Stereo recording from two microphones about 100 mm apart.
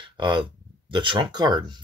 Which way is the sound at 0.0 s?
50° right (ahead or behind).